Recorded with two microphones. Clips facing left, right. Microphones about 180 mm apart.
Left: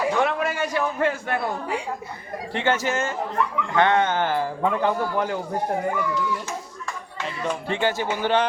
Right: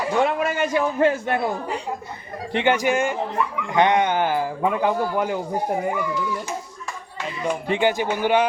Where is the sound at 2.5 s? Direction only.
15° right (ahead or behind).